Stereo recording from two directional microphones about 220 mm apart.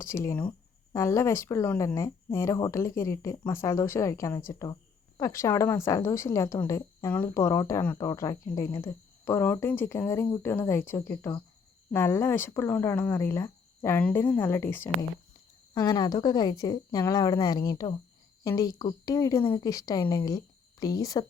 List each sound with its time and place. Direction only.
0.0 s speech: 10° left (ahead or behind)